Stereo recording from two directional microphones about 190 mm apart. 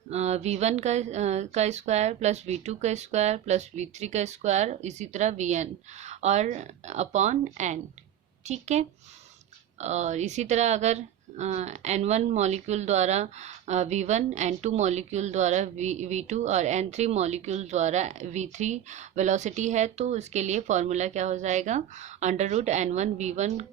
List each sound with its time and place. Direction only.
0.1 s speech: 35° right (ahead or behind)